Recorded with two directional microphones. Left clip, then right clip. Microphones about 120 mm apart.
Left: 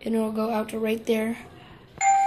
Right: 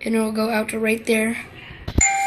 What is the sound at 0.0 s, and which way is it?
A woman's voice, 10° left (ahead or behind).